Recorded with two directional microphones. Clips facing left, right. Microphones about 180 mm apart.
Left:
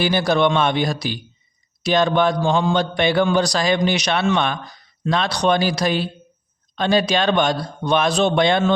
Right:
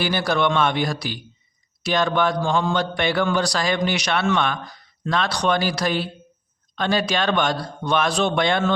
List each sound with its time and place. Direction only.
0.0 s a man's voice: 20° left (ahead or behind)